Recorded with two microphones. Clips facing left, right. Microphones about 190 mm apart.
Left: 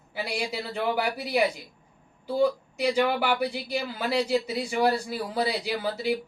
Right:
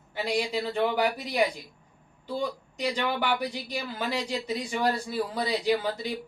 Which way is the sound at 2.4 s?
10° left (ahead or behind).